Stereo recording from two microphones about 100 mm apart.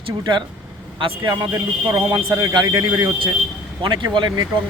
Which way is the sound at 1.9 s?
30° right (ahead or behind).